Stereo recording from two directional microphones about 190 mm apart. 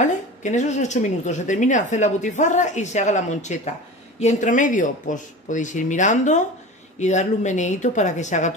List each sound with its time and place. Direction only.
0.0 s a woman's voice: 40° left (ahead or behind)